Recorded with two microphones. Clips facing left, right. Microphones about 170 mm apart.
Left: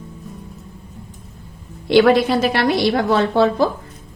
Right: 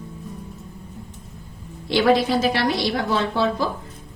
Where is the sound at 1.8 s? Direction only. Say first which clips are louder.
Left 5 dB; 60° left (ahead or behind).